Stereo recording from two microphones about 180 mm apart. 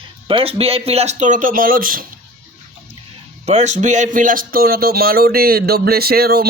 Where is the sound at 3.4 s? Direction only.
40° right (ahead or behind).